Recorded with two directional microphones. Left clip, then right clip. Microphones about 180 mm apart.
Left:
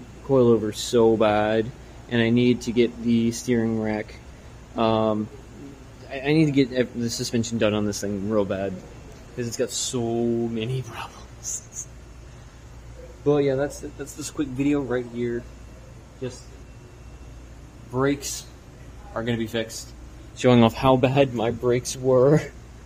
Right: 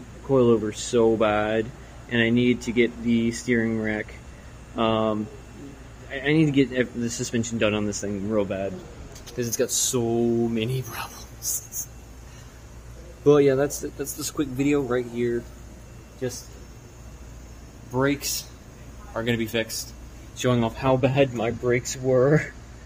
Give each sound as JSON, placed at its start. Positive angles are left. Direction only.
{"t": 0.3, "sound": "a man's voice", "side_deg": 15}
{"t": 7.2, "sound": "speech", "side_deg": 25}
{"t": 9.4, "sound": "speech", "side_deg": 0}
{"t": 13.2, "sound": "speech", "side_deg": -20}
{"t": 14.4, "sound": "speech", "side_deg": -5}
{"t": 17.9, "sound": "a man's voice", "side_deg": 5}
{"t": 20.7, "sound": "speech", "side_deg": 30}